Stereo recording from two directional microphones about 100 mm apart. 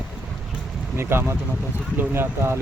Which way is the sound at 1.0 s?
25° right (ahead or behind).